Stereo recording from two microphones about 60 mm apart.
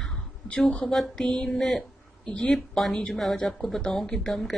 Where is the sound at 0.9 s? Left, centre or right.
Centre.